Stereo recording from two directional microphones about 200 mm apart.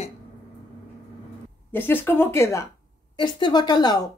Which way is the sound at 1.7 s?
10° left (ahead or behind).